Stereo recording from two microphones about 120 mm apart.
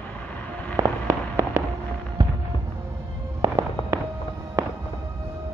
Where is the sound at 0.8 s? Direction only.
20° right (ahead or behind).